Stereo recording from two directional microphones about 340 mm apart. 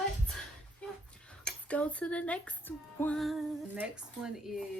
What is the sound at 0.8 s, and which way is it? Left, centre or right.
Speech, centre.